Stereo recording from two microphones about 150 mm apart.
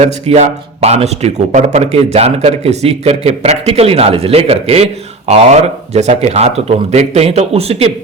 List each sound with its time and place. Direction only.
0.0 s a man's voice: 45° right (ahead or behind)
5.9 s a man's voice: 45° right (ahead or behind)